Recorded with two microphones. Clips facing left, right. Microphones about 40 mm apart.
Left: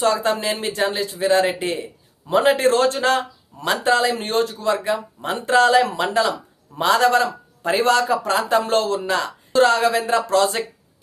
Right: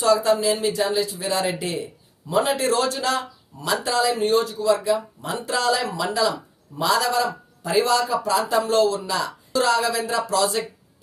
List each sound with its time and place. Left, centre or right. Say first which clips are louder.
0.0 s a man's voice: right 1 dB; left